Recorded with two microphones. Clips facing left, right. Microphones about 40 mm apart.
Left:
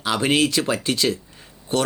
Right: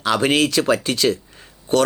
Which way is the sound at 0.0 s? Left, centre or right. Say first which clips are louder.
Right 2 dB; right.